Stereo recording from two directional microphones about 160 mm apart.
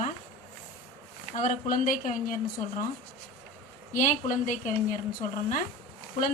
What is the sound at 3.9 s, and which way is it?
A woman's voice, 55° left (ahead or behind).